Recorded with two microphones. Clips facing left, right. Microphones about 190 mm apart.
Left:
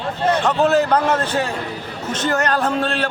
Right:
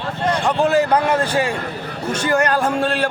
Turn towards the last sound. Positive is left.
turn(degrees=-10)  # may be behind; listen again after turning